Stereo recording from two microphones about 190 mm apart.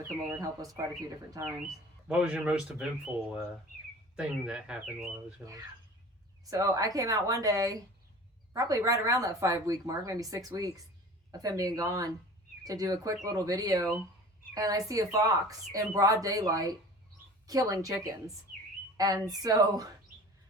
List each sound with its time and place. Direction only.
1.3 s speech: 15° right (ahead or behind)
1.6 s speech: 5° right (ahead or behind)
5.4 s speech: 15° right (ahead or behind)